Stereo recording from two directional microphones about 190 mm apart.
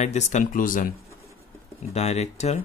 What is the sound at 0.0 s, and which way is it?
Speech, 35° left (ahead or behind).